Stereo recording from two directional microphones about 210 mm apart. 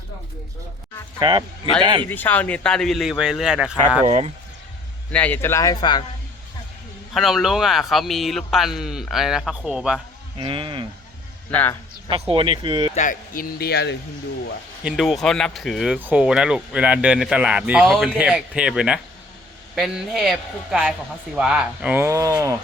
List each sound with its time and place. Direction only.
1.2 s speech: 20° right (ahead or behind)
2.0 s speech: 10° left (ahead or behind)
4.0 s speech: 35° right (ahead or behind)
5.1 s speech: 10° left (ahead or behind)
7.1 s speech: centre (ahead or behind)
10.3 s speech: 25° right (ahead or behind)
11.5 s speech: 10° left (ahead or behind)
12.3 s speech: 25° right (ahead or behind)
12.9 s speech: 35° left (ahead or behind)
14.8 s speech: centre (ahead or behind)